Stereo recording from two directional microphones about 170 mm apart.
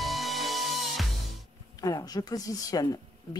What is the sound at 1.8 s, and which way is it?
Speech, 20° left (ahead or behind).